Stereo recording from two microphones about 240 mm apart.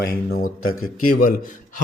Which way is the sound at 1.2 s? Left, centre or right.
Left.